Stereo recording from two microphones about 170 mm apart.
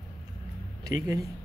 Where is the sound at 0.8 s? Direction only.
20° right (ahead or behind).